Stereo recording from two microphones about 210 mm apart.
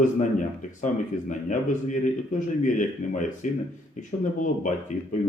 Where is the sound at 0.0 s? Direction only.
35° left (ahead or behind).